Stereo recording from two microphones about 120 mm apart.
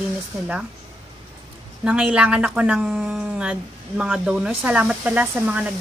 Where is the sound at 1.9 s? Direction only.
10° right (ahead or behind).